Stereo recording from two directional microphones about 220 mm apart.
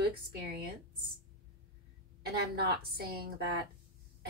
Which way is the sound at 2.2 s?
45° right (ahead or behind).